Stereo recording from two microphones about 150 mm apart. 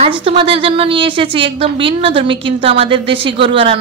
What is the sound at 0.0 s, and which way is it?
A woman's voice, 40° right (ahead or behind).